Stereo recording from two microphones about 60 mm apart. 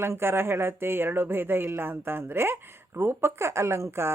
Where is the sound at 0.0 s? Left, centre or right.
Right.